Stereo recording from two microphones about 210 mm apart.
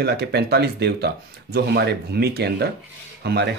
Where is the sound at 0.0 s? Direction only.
50° right (ahead or behind).